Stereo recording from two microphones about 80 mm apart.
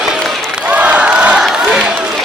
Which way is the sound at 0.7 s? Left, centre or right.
Centre.